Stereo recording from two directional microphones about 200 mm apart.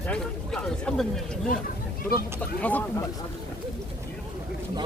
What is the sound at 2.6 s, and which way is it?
Speech, 10° left (ahead or behind).